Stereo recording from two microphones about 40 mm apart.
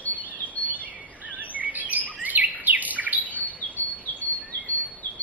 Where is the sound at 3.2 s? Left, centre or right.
Left.